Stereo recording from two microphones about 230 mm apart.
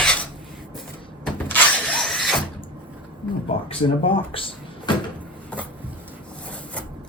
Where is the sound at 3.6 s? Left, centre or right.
Left.